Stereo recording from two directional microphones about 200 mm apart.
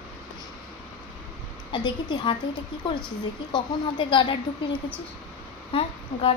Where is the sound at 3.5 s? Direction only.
25° left (ahead or behind).